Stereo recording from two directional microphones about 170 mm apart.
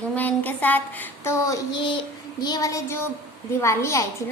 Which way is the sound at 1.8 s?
30° left (ahead or behind).